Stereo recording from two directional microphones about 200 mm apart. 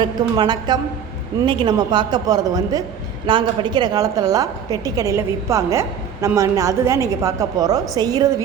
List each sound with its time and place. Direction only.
0.0 s a woman's voice: 20° right (ahead or behind)